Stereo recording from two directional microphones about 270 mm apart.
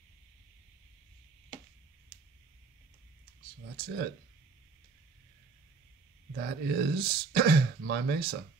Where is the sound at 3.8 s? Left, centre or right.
Right.